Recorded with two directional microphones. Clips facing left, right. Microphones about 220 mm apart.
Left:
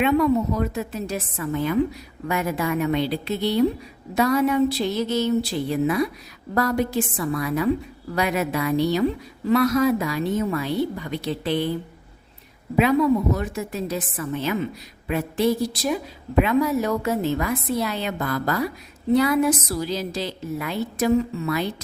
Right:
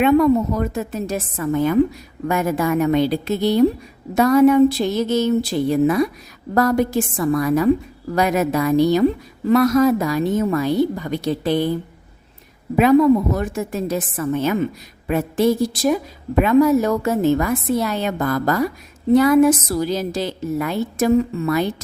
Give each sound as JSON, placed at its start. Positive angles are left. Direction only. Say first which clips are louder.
{"t": 0.0, "sound": "a woman's voice", "louder": "right 5 dB", "side_deg": -45}
{"t": 13.3, "sound": "a woman's voice", "louder": "right 4 dB", "side_deg": -45}